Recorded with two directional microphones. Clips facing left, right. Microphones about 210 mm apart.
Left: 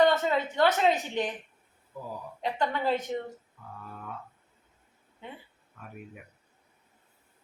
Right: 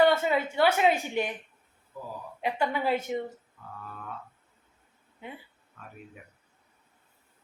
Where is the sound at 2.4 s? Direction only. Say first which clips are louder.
Right 1 dB; 10° right (ahead or behind).